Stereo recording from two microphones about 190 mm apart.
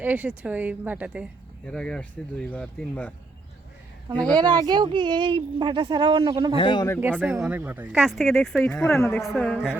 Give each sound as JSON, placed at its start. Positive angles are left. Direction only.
{"t": 0.0, "sound": "a woman's voice", "side_deg": -10}
{"t": 1.6, "sound": "speech", "side_deg": 5}
{"t": 4.4, "sound": "speech", "side_deg": -20}
{"t": 6.6, "sound": "speech", "side_deg": 25}
{"t": 7.0, "sound": "speech", "side_deg": -10}